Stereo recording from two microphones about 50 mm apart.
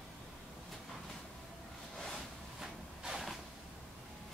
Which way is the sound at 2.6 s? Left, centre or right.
Centre.